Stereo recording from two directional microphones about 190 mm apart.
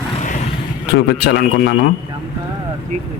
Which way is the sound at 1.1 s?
60° left (ahead or behind).